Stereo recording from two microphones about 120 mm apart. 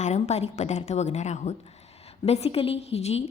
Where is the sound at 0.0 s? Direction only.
70° left (ahead or behind).